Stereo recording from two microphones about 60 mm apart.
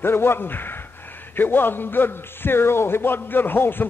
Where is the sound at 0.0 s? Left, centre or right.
Left.